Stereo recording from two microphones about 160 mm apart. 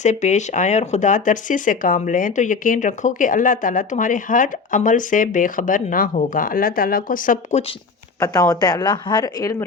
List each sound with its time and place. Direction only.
0.0 s speech: 45° left (ahead or behind)
8.2 s speech: 20° left (ahead or behind)